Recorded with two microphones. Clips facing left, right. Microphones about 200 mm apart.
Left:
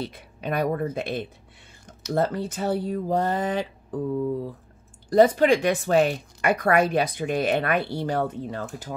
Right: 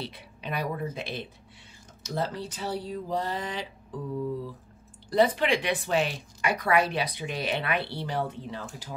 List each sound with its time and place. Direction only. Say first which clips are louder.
0.0 s speech: left 6 dB; 45° left (ahead or behind)